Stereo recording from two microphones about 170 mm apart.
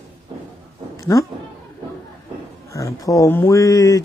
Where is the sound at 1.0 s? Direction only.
20° left (ahead or behind).